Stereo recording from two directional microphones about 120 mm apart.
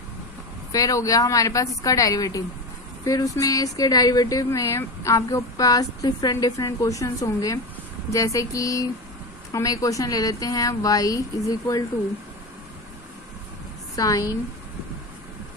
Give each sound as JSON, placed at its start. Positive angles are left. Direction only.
{"t": 0.7, "sound": "speech", "side_deg": 30}
{"t": 13.9, "sound": "speech", "side_deg": 30}